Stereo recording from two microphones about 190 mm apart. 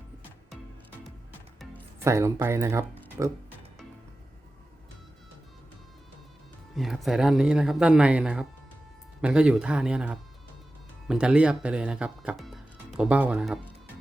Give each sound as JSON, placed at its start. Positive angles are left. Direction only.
{"t": 2.0, "sound": "speech", "side_deg": -15}
{"t": 6.7, "sound": "speech", "side_deg": 0}